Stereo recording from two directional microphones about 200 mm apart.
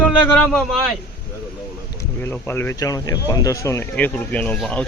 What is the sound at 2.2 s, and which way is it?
Speech, 10° left (ahead or behind).